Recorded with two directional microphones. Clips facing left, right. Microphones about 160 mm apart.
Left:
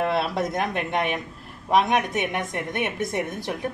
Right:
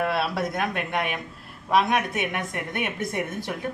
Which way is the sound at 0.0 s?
25° left (ahead or behind).